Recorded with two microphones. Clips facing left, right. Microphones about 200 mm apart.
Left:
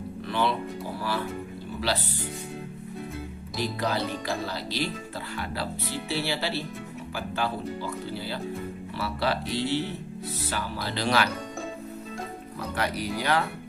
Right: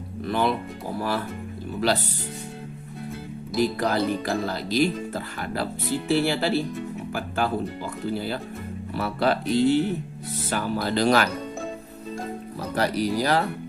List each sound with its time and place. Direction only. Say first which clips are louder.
0.3 s speech: right 3 dB; 40° right (ahead or behind)
1.8 s speech: right 6 dB; 45° right (ahead or behind)
3.6 s speech: right 6 dB; 45° right (ahead or behind)
12.5 s speech: right 5 dB; 40° right (ahead or behind)